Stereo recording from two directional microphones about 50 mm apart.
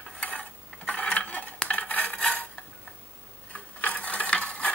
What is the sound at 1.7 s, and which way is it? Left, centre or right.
Dishes, left.